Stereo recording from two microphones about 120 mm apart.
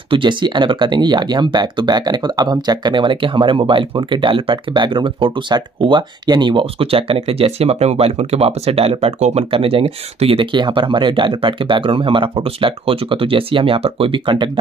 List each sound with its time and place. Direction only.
0.1 s speech: 40° right (ahead or behind)